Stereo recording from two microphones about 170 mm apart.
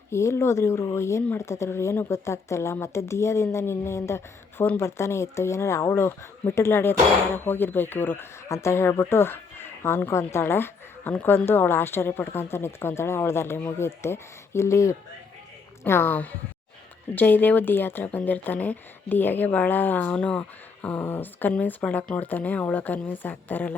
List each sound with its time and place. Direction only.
0.1 s speech: 15° left (ahead or behind)